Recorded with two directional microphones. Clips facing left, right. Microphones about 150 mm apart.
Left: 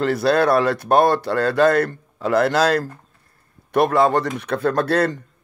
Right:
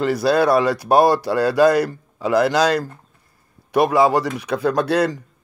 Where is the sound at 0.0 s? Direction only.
5° right (ahead or behind).